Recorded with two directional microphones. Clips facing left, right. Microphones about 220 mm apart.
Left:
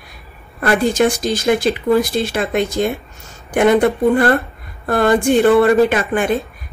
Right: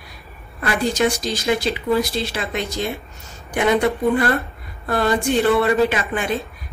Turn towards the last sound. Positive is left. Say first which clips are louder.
# left 5 dB
turn(degrees=50)  # may be behind; listen again after turning